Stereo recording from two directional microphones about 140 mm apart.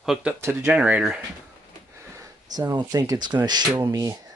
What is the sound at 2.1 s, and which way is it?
Speech, 25° right (ahead or behind).